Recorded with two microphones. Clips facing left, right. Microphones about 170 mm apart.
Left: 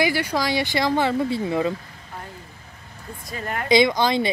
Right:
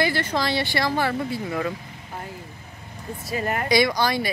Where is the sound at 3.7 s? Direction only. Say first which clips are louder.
Left 4 dB; 20° left (ahead or behind).